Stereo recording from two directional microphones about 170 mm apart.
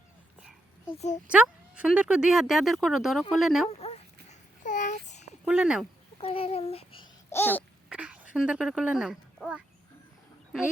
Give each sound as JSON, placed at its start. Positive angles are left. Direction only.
{"t": 0.9, "sound": "speech", "side_deg": 45}
{"t": 1.3, "sound": "speech", "side_deg": -5}
{"t": 3.7, "sound": "babbling", "side_deg": 40}
{"t": 5.5, "sound": "speech", "side_deg": -5}
{"t": 6.1, "sound": "speech", "side_deg": 35}
{"t": 7.3, "sound": "babbling", "side_deg": 15}
{"t": 7.9, "sound": "speech", "side_deg": -5}